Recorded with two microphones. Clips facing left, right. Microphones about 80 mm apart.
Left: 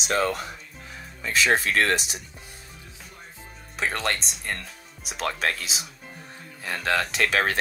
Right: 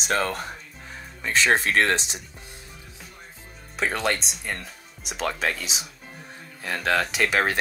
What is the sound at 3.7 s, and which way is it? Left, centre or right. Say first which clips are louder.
Speech: right 2 dB; centre.